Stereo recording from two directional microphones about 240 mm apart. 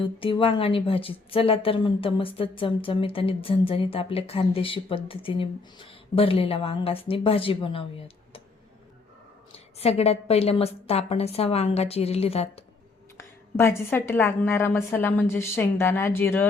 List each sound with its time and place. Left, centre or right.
0.0 s a woman's voice: left
9.8 s a woman's voice: left
13.1 s a woman's voice: centre